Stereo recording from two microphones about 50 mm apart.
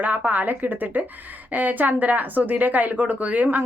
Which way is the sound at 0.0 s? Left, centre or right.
Right.